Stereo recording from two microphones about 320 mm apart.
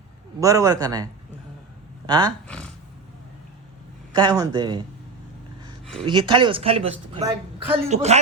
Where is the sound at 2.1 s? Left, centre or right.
Centre.